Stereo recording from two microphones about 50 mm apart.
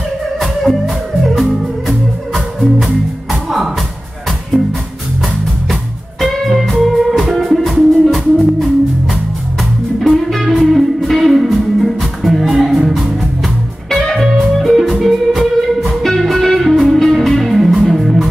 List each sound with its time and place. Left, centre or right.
0.4 s music: centre
6.2 s music: centre
10.1 s music: centre
14.6 s music: centre